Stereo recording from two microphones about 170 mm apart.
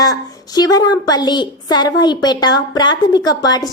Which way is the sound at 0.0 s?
20° left (ahead or behind).